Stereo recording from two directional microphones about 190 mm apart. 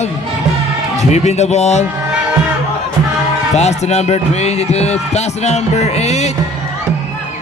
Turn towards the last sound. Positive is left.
turn(degrees=35)  # may be behind; listen again after turning